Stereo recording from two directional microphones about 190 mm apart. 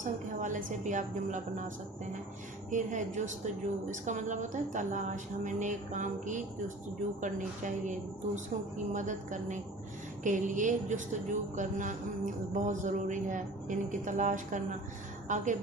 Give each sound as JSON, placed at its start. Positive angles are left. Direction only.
{"t": 0.0, "sound": "a woman's voice", "side_deg": -40}